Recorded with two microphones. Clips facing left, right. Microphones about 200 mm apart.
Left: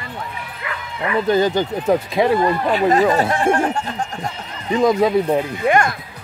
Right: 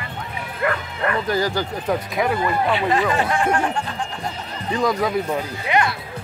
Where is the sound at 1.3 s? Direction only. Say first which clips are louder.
Left 5 dB; 20° left (ahead or behind).